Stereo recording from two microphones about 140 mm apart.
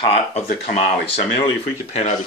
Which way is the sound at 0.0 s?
45° left (ahead or behind).